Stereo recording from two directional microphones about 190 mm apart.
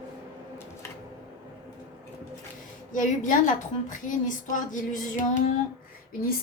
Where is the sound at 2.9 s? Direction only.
45° left (ahead or behind).